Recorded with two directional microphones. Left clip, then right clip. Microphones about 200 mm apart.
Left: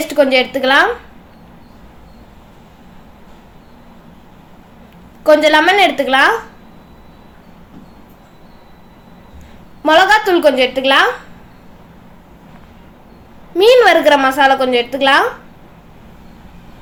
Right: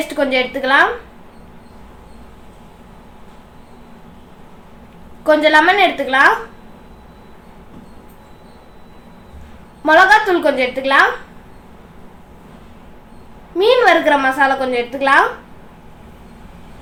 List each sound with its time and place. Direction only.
0.1 s a woman's voice: 45° left (ahead or behind)
5.2 s a woman's voice: 45° left (ahead or behind)
9.8 s a woman's voice: 45° left (ahead or behind)
13.6 s a woman's voice: 50° left (ahead or behind)